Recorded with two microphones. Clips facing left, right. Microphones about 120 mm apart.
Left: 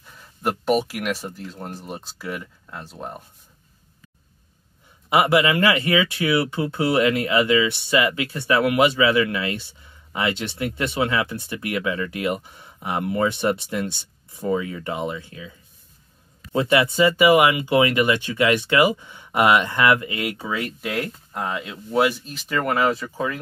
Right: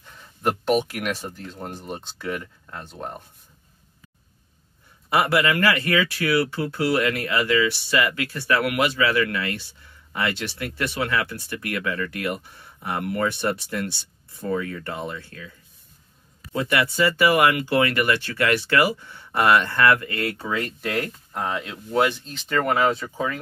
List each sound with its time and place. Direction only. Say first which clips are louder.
0.0 s speech: right 1 dB; 5° left (ahead or behind)
5.1 s speech: left 3 dB; 15° left (ahead or behind)
16.5 s speech: left 4 dB; 20° left (ahead or behind); by 23.4 s centre (ahead or behind)